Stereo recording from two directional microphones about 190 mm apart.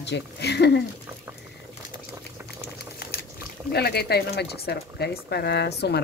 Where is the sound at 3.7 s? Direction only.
60° left (ahead or behind).